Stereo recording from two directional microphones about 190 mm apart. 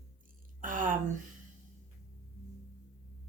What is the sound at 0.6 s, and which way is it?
Speech, 45° right (ahead or behind).